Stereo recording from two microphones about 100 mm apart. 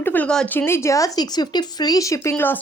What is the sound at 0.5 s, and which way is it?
Speech, 25° left (ahead or behind).